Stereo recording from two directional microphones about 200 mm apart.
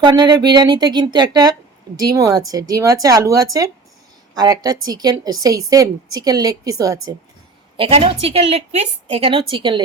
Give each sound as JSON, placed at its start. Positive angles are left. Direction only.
{"t": 0.0, "sound": "a woman's voice", "side_deg": -20}
{"t": 7.8, "sound": "a woman's voice", "side_deg": -30}